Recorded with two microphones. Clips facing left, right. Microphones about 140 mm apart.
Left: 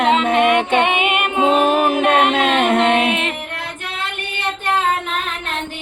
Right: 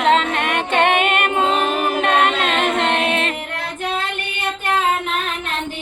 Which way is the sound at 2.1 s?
55° left (ahead or behind).